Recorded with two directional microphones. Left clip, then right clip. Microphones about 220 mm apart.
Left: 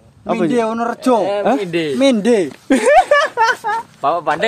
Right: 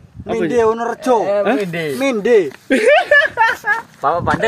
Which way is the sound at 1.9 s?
45° left (ahead or behind).